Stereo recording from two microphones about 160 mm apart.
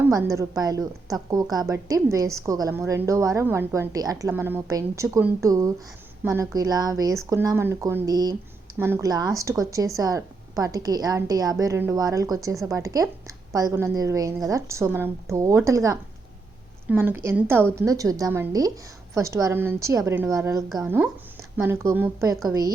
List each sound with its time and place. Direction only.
0.0 s a woman's voice: 20° right (ahead or behind)